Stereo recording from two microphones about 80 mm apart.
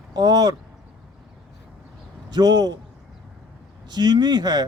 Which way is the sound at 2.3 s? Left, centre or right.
Right.